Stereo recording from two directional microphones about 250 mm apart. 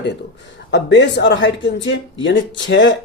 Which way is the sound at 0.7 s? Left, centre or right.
Left.